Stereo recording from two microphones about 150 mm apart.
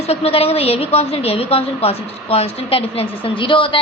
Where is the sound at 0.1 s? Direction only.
45° left (ahead or behind).